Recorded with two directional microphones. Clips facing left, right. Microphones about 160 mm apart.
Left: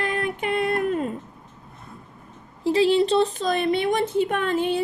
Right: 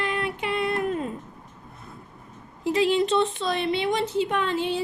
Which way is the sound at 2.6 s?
30° left (ahead or behind).